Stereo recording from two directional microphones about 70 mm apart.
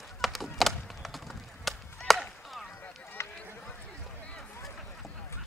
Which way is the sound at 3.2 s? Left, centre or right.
Left.